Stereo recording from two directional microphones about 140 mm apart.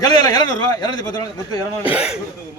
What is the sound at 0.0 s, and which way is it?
A man's voice, 30° left (ahead or behind).